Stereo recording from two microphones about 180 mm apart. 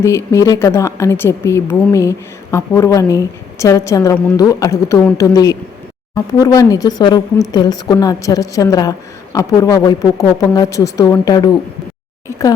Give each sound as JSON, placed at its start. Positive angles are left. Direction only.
{"t": 0.0, "sound": "a woman's voice", "side_deg": 15}